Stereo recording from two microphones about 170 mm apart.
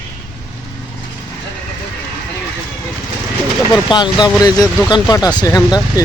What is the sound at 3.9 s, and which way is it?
Speech, 25° left (ahead or behind).